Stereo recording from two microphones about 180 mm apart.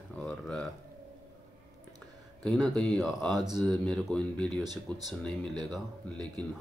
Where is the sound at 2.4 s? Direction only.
Centre (ahead or behind).